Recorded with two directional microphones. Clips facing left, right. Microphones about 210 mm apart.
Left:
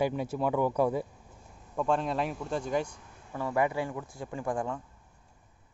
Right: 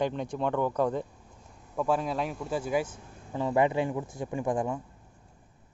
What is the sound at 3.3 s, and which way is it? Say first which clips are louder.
Speech: right 3 dB; 20° right (ahead or behind).